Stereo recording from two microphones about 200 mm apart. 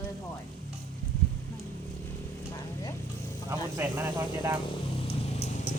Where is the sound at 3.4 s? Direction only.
15° right (ahead or behind).